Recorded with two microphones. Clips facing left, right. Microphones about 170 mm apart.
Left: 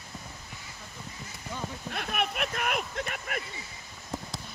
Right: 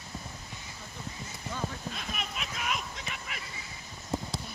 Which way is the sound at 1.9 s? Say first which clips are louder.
Left 7 dB; 60° left (ahead or behind).